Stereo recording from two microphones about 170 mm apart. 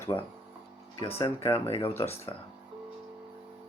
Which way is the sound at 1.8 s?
15° left (ahead or behind).